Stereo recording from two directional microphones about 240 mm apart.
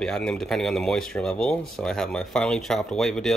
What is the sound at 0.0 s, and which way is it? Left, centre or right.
Speech, centre.